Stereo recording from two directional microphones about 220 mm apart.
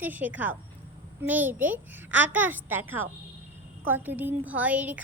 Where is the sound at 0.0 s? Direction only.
5° right (ahead or behind).